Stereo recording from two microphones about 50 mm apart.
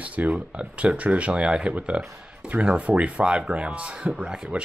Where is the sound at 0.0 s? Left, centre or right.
Right.